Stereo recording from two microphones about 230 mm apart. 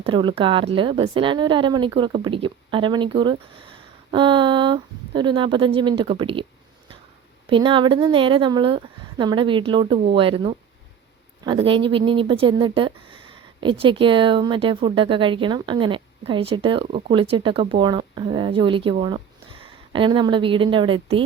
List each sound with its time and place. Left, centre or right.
0.0 s speech: right
7.5 s speech: right